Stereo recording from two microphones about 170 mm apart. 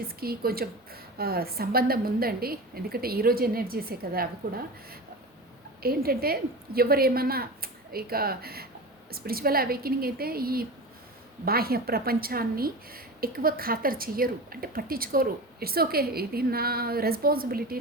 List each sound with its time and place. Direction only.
0.2 s a woman's voice: 60° right (ahead or behind)
5.8 s a woman's voice: 65° right (ahead or behind)